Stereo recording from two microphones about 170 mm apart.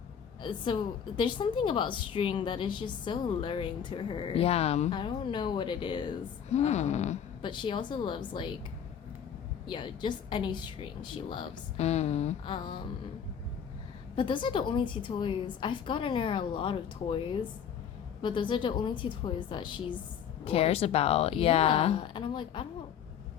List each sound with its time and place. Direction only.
0.4 s a woman's voice: 30° left (ahead or behind)
6.5 s speech: 40° left (ahead or behind)
7.4 s a woman's voice: 30° left (ahead or behind)
9.6 s a woman's voice: 30° left (ahead or behind)
11.9 s speech: 40° left (ahead or behind)
12.5 s a woman's voice: 25° left (ahead or behind)
14.2 s a woman's voice: 30° left (ahead or behind)